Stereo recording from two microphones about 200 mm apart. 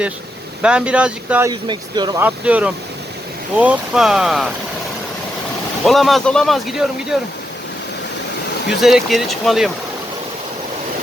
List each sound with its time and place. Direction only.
0.6 s speech: 5° right (ahead or behind)
1.5 s speech: 20° right (ahead or behind)
2.2 s speech: 5° right (ahead or behind)
5.8 s speech: centre (ahead or behind)
8.8 s speech: centre (ahead or behind)